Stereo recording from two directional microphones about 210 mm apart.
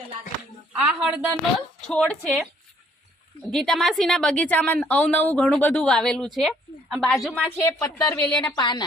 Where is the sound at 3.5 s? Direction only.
Centre (ahead or behind).